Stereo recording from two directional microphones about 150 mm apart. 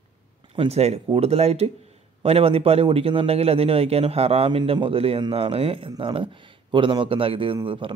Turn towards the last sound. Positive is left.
turn(degrees=-35)  # may be behind; listen again after turning